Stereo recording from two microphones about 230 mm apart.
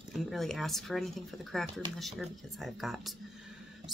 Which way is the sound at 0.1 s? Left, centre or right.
Centre.